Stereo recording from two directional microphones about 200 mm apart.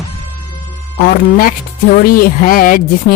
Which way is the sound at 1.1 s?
45° left (ahead or behind).